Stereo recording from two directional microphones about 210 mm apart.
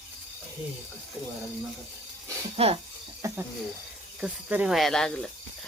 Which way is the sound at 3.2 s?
15° right (ahead or behind).